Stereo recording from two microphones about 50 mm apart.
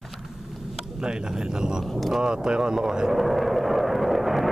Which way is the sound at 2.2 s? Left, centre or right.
Centre.